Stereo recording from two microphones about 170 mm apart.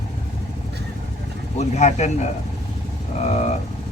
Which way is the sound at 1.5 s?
40° left (ahead or behind).